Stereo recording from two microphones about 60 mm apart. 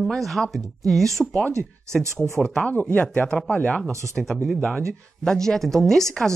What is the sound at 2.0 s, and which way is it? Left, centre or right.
Speech, right.